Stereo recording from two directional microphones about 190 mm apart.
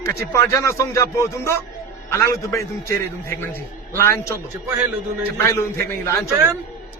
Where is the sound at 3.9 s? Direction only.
15° left (ahead or behind).